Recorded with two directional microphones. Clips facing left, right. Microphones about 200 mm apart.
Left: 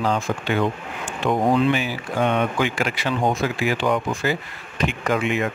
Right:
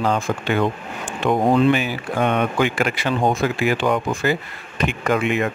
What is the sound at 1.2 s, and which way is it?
Speech, 60° right (ahead or behind).